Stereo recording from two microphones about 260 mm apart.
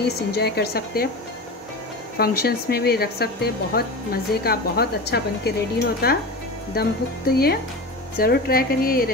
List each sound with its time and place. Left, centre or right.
0.0 s speech: left
2.1 s speech: left